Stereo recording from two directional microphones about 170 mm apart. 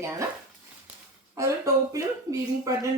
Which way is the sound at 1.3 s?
20° right (ahead or behind).